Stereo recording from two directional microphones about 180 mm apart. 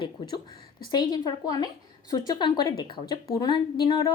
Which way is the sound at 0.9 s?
20° left (ahead or behind).